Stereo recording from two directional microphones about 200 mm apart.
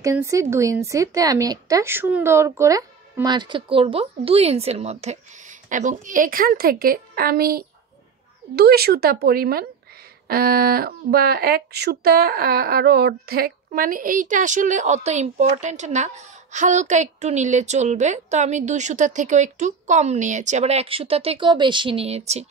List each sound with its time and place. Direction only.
0.0 s a woman's voice: 15° right (ahead or behind); by 22.5 s 35° right (ahead or behind)